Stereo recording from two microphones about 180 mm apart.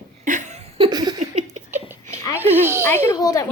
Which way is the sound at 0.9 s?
25° right (ahead or behind).